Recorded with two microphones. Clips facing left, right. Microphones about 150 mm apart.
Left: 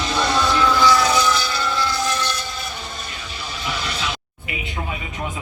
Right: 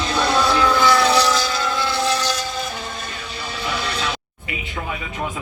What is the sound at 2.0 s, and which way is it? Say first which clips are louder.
Vehicle: right 3 dB; 35° right (ahead or behind).